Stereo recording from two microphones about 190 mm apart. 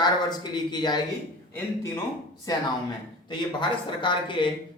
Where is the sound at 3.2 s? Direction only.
25° left (ahead or behind).